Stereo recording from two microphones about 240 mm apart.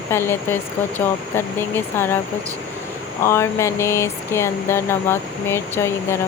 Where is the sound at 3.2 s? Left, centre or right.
Centre.